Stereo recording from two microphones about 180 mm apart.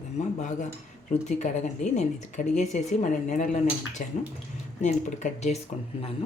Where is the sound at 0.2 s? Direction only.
40° left (ahead or behind).